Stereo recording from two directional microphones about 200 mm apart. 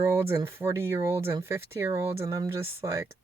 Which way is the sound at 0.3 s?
15° right (ahead or behind).